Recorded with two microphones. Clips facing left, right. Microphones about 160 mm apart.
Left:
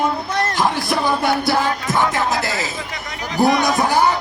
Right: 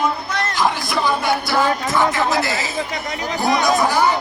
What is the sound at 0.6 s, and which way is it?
Music, 60° left (ahead or behind).